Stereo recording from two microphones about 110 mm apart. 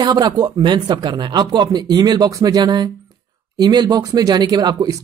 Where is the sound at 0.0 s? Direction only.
40° right (ahead or behind).